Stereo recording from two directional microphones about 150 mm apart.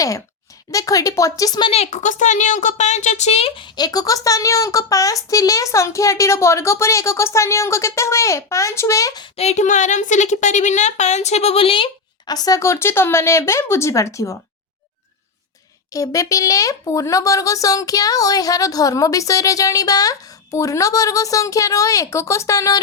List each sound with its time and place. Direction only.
0.7 s speech: 20° left (ahead or behind)
9.3 s a woman's voice: 45° left (ahead or behind); by 14.3 s 20° left (ahead or behind)
15.9 s speech: 20° left (ahead or behind)